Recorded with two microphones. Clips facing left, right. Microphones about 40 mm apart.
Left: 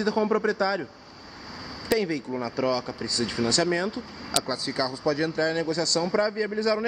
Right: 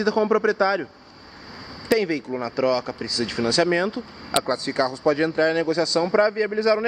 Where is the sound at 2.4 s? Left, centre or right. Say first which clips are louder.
Right 5 dB; right.